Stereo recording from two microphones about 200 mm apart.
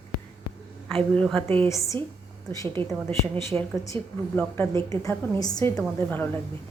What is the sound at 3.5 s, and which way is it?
Speech, 5° right (ahead or behind).